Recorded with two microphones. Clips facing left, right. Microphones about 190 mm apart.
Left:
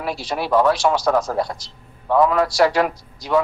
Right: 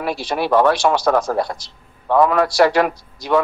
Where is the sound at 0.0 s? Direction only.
65° right (ahead or behind).